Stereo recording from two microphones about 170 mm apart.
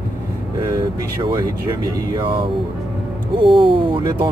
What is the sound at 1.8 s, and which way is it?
Speech, 30° right (ahead or behind).